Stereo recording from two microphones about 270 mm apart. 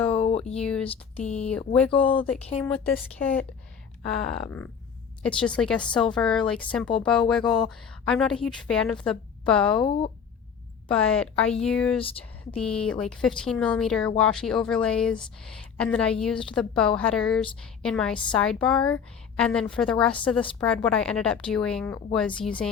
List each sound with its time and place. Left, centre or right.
0.1 s a sound: left
0.5 s a woman's voice: centre
0.9 s speech: left
1.5 s a woman's voice: centre
9.7 s speech: centre
10.8 s a woman's voice: centre